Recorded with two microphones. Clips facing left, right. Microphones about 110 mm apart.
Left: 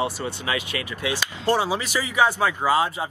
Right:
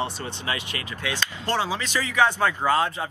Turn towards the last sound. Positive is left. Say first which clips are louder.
# left 1 dB
turn(degrees=10)  # may be behind; listen again after turning